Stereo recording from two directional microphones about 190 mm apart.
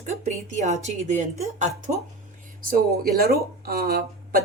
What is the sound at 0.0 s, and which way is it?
A woman's voice, 35° right (ahead or behind).